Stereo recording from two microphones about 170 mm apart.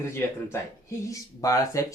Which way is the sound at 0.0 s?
15° left (ahead or behind).